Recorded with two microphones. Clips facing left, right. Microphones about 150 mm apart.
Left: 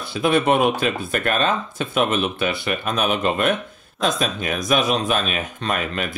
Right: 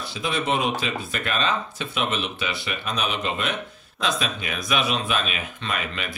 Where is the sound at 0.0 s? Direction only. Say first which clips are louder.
Left 8 dB; 55° left (ahead or behind).